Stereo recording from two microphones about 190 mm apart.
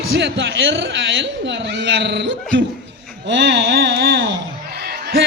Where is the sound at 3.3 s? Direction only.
70° right (ahead or behind).